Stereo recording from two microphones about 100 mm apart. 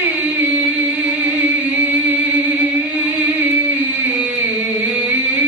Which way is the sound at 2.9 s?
20° right (ahead or behind).